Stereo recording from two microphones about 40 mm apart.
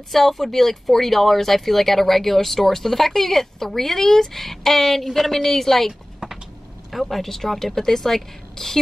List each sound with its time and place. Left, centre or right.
0.1 s speech: centre